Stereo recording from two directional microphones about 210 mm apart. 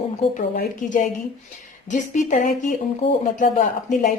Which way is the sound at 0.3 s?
40° left (ahead or behind).